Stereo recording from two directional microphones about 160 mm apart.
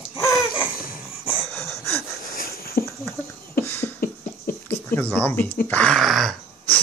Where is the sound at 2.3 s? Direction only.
70° left (ahead or behind).